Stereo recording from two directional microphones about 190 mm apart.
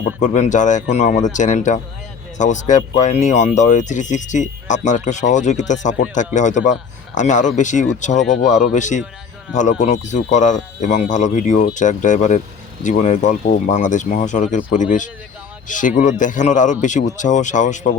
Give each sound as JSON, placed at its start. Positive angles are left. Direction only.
{"t": 0.2, "sound": "speech", "side_deg": 40}